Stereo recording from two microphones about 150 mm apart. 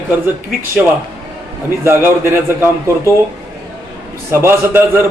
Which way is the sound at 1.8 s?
15° right (ahead or behind).